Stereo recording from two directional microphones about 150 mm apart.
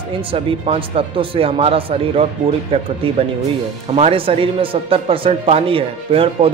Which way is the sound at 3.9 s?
40° right (ahead or behind).